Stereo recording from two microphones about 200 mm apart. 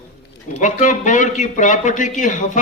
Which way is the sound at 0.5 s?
40° left (ahead or behind).